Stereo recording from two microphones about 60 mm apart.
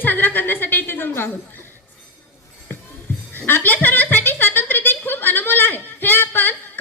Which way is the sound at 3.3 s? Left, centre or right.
Left.